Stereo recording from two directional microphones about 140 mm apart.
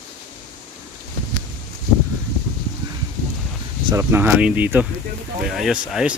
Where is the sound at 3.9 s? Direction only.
15° right (ahead or behind).